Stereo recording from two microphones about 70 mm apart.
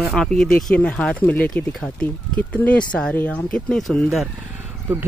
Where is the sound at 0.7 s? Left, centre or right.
Centre.